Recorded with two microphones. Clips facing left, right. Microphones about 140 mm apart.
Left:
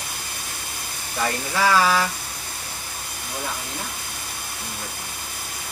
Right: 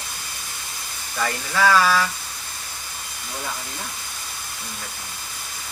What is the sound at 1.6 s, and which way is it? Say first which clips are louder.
Speech: right 1 dB; 20° left (ahead or behind).